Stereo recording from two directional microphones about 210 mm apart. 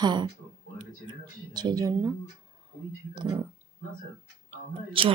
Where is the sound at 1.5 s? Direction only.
20° right (ahead or behind).